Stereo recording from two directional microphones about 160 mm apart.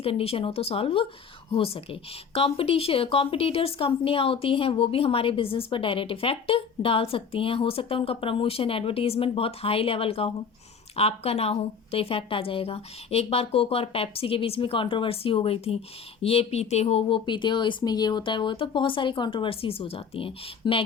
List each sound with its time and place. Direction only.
0.0 s speech: 35° left (ahead or behind)